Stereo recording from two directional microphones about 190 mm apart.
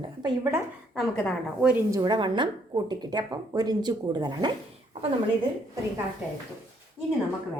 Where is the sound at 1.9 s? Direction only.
20° right (ahead or behind).